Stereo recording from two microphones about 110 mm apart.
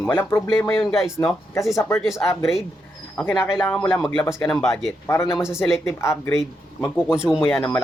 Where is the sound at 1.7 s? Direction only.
25° left (ahead or behind).